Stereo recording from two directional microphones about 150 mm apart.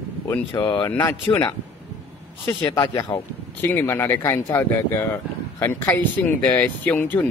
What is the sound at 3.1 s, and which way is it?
Speech, 20° left (ahead or behind).